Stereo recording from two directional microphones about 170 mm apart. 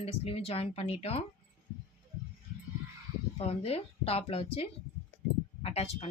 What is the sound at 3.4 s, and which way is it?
Speech, 35° left (ahead or behind).